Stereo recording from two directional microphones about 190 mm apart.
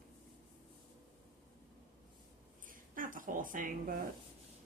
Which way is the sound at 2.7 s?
45° right (ahead or behind).